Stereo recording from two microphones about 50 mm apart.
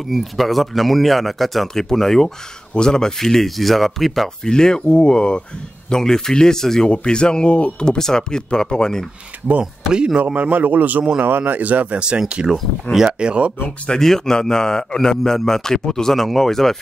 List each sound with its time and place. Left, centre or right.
0.1 s speech: centre
4.5 s a man's voice: centre
9.5 s speech: centre
10.2 s a man's voice: right
12.0 s speech: centre
13.8 s a man's voice: centre